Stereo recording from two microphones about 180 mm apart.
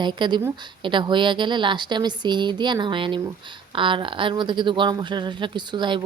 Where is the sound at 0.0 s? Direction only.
25° right (ahead or behind).